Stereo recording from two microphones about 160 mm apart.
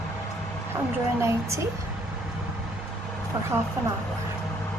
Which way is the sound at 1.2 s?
15° right (ahead or behind).